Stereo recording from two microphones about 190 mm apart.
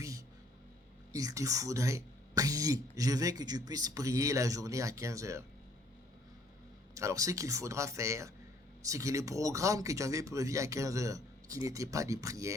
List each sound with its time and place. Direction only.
1.1 s speech: 20° right (ahead or behind)
6.9 s speech: 15° right (ahead or behind)